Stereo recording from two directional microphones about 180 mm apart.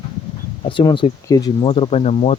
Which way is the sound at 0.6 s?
25° left (ahead or behind).